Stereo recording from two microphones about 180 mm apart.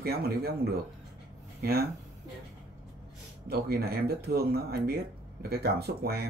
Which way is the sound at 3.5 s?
60° right (ahead or behind).